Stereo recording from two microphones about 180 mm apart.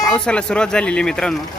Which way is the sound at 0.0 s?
5° left (ahead or behind).